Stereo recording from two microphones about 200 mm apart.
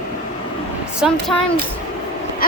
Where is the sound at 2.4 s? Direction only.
45° left (ahead or behind).